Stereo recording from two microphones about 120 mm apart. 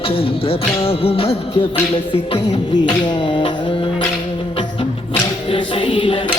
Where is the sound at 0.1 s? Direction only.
50° left (ahead or behind).